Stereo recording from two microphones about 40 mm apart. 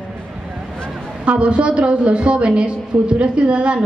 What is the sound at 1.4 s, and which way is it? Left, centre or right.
A woman's voice, right.